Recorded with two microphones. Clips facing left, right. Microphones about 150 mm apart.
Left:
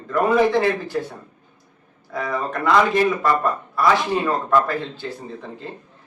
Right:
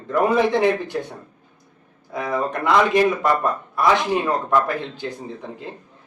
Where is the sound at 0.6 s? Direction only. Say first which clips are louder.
Right 1 dB; 20° right (ahead or behind).